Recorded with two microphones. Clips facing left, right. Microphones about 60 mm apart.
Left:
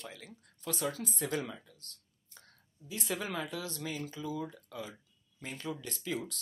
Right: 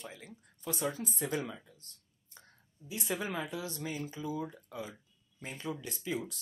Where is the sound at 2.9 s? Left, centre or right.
Centre.